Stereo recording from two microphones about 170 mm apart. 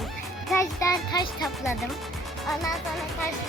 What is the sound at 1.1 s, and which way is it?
Speech, 25° left (ahead or behind).